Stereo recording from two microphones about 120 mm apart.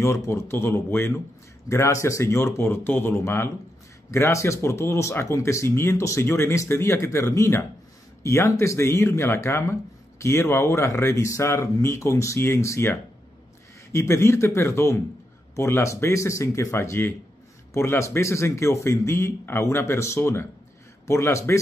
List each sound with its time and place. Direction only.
0.0 s speech: 25° left (ahead or behind)
13.9 s speech: 25° left (ahead or behind)